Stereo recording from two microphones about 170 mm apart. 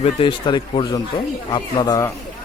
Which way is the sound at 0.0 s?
30° left (ahead or behind).